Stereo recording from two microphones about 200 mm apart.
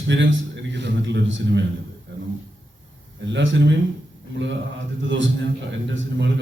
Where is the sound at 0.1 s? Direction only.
70° right (ahead or behind).